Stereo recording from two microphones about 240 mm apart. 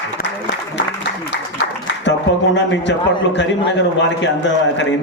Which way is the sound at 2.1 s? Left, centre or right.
Left.